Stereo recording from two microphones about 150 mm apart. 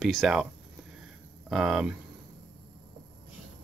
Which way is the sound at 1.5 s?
5° right (ahead or behind).